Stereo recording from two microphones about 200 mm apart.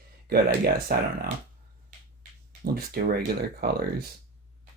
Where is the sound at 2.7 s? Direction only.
50° right (ahead or behind).